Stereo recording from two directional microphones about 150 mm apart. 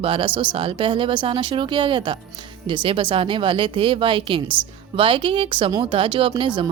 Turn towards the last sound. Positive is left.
turn(degrees=-35)  # may be behind; listen again after turning